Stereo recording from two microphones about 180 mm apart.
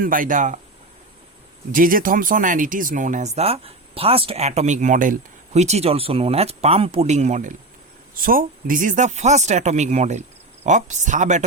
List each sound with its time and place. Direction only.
0.0 s speech: 50° right (ahead or behind)
1.7 s speech: 50° right (ahead or behind)
8.1 s speech: 50° right (ahead or behind)